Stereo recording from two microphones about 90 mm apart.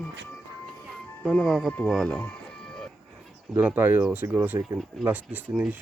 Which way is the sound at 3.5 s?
20° right (ahead or behind).